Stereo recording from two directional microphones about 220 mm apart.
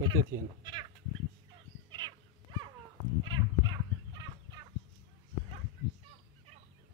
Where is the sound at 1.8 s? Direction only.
20° right (ahead or behind).